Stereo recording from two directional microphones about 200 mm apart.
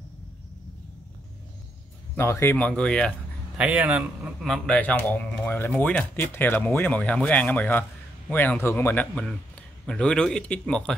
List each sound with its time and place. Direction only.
2.1 s speech: 15° left (ahead or behind)
3.5 s a man's voice: 5° right (ahead or behind)